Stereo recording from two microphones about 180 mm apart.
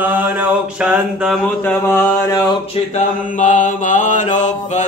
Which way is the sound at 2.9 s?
45° left (ahead or behind).